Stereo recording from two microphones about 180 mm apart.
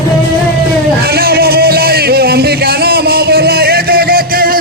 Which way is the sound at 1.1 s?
60° right (ahead or behind).